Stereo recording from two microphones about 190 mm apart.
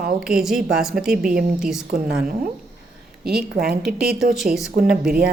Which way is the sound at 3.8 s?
5° right (ahead or behind).